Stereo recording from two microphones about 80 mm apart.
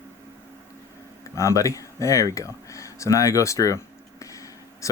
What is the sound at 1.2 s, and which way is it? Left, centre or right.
Speech, left.